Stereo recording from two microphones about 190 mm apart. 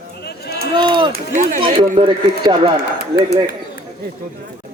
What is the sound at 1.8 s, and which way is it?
Speech, 40° right (ahead or behind).